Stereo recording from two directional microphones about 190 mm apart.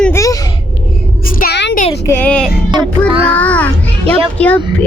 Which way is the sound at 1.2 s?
50° left (ahead or behind).